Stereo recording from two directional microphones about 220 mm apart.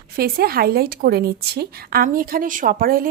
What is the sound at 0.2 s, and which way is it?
A woman's voice, 45° right (ahead or behind).